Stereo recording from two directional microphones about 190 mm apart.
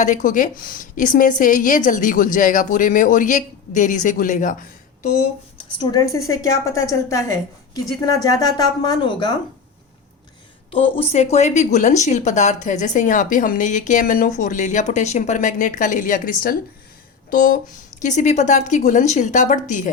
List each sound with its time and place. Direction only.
0.0 s a woman's voice: 40° left (ahead or behind)
5.7 s a woman's voice: 20° left (ahead or behind)
10.7 s a woman's voice: 30° left (ahead or behind)